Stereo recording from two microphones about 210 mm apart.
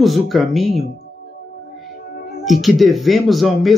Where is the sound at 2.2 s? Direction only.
45° left (ahead or behind).